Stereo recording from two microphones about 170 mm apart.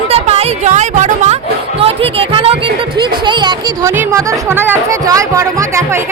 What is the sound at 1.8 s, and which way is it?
Music, 35° right (ahead or behind).